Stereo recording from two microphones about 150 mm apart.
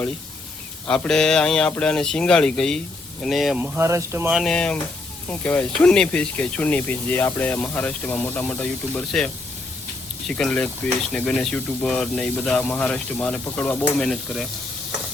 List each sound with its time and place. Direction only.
0.9 s speech: 5° left (ahead or behind)
3.6 s speech: 20° right (ahead or behind)
4.3 s speech: centre (ahead or behind)